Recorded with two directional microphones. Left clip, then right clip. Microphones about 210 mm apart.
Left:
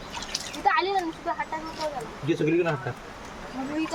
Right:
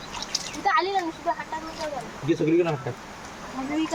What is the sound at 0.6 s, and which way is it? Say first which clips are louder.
Speech: even; 5° right (ahead or behind).